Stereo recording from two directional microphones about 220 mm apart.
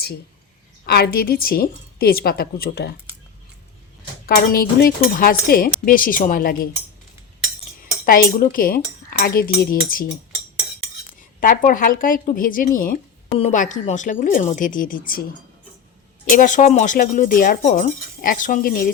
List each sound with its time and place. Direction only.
0.9 s a woman's voice: 45° left (ahead or behind)
4.4 s speech: 40° left (ahead or behind)
8.0 s speech: 40° left (ahead or behind)
11.2 s speech: 40° left (ahead or behind)
16.3 s speech: 35° left (ahead or behind)